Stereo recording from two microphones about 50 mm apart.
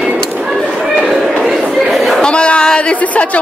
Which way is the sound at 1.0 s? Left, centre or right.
Centre.